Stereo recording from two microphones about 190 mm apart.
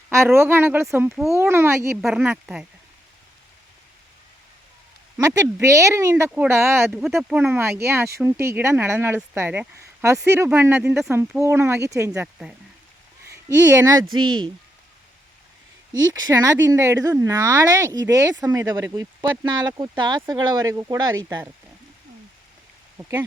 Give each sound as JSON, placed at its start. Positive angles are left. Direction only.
{"t": 0.1, "sound": "speech", "side_deg": -15}
{"t": 5.2, "sound": "speech", "side_deg": -15}
{"t": 6.9, "sound": "speech", "side_deg": 0}
{"t": 16.1, "sound": "speech", "side_deg": -20}
{"t": 23.0, "sound": "speech", "side_deg": -10}